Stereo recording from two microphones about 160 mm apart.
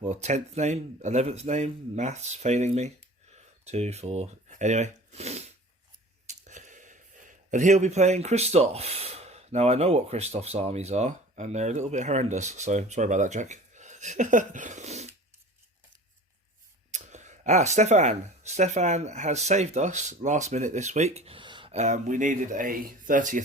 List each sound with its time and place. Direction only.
0.0 s speech: 45° right (ahead or behind)
16.9 s speech: 45° right (ahead or behind); by 21.7 s 30° right (ahead or behind)
21.7 s speech: 45° right (ahead or behind)